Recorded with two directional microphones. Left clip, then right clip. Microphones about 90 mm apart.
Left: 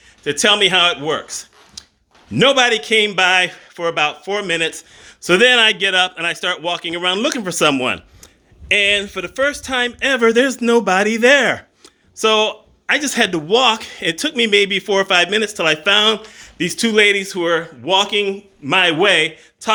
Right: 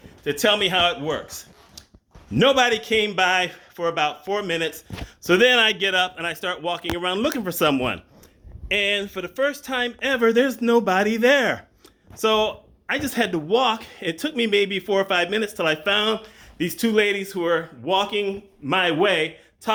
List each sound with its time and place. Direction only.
0.3 s a man's voice: 10° left (ahead or behind)
1.8 s a sound: 15° left (ahead or behind)
2.3 s a man's voice: centre (ahead or behind); by 19.7 s 20° left (ahead or behind)